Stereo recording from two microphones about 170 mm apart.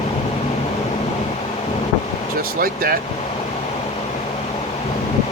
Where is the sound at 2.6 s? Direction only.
60° right (ahead or behind).